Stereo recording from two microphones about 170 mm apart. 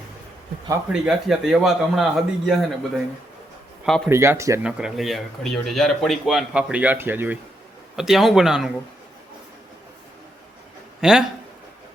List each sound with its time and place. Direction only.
0.9 s speech: 5° right (ahead or behind)
4.1 s speech: 15° right (ahead or behind)
4.6 s speech: 5° right (ahead or behind)
11.0 s speech: 5° right (ahead or behind)